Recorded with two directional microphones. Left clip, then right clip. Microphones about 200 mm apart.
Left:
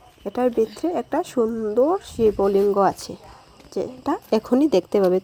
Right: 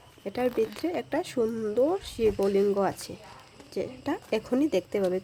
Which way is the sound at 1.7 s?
10° left (ahead or behind).